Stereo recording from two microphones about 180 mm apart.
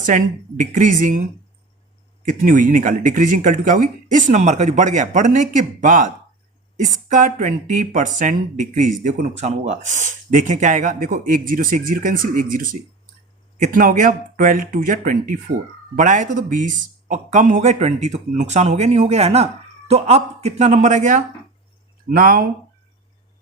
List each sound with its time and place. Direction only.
0.0 s speech: 45° right (ahead or behind)
2.2 s speech: 45° right (ahead or behind)